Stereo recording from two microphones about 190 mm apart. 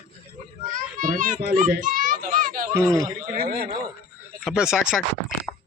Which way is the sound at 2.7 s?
15° right (ahead or behind).